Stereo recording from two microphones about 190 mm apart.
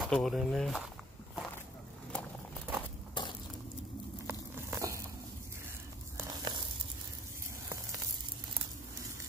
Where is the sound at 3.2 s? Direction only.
25° left (ahead or behind).